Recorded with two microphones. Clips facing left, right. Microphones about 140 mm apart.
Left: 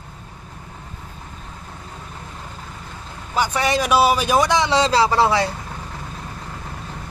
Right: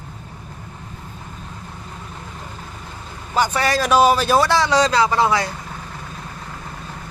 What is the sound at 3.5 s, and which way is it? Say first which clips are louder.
A man's voice: even; 15° left (ahead or behind).